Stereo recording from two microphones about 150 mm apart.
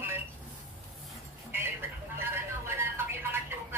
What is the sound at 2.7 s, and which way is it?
Music, 15° right (ahead or behind).